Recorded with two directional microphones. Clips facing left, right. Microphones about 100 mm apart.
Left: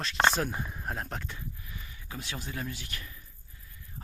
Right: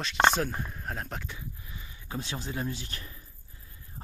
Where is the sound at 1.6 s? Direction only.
25° right (ahead or behind).